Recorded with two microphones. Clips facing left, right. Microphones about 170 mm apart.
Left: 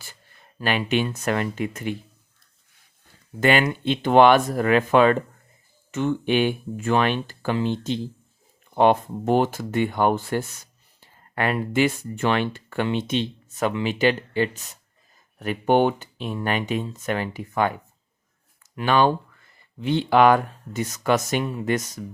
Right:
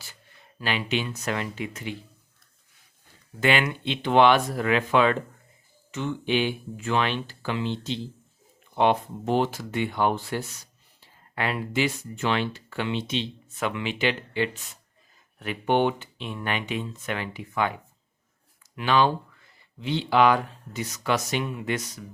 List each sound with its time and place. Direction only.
0.6 s speech: 50° left (ahead or behind)
3.4 s speech: 40° left (ahead or behind)